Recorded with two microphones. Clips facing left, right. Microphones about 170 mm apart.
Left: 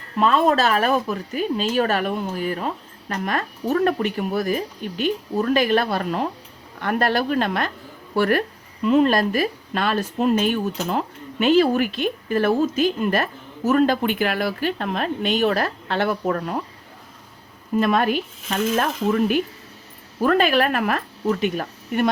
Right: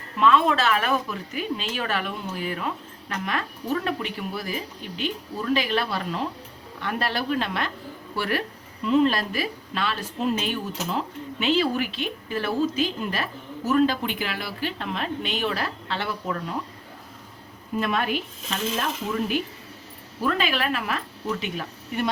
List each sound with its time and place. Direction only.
0.2 s a woman's voice: 40° left (ahead or behind)
17.7 s a woman's voice: 45° left (ahead or behind)
18.5 s a woman's voice: 55° left (ahead or behind)